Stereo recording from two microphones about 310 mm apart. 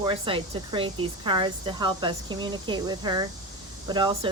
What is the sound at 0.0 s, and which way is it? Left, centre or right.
Speech, centre.